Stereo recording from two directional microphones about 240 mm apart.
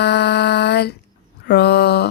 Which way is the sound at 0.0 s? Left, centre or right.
Left.